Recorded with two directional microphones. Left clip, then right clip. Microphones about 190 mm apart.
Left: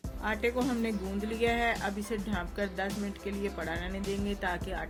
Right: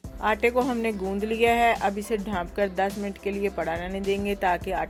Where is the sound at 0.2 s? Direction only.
40° right (ahead or behind).